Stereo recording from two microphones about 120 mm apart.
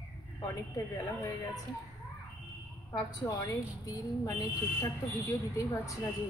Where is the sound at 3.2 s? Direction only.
20° left (ahead or behind).